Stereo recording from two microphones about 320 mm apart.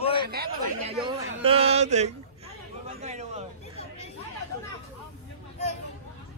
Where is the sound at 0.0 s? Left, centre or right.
Centre.